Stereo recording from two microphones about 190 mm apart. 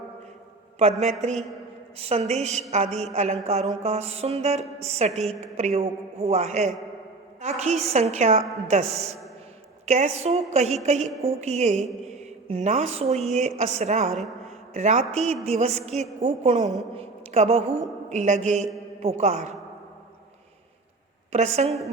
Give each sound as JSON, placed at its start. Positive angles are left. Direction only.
{"t": 0.8, "sound": "a woman's voice", "side_deg": -35}
{"t": 14.4, "sound": "a sound", "side_deg": -35}
{"t": 15.1, "sound": "a woman's voice", "side_deg": -35}
{"t": 21.3, "sound": "a woman's voice", "side_deg": -35}